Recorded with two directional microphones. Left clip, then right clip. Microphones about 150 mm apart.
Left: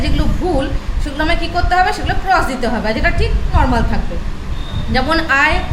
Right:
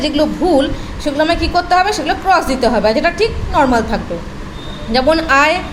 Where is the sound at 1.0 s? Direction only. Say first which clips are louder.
Right 4 dB; 25° right (ahead or behind).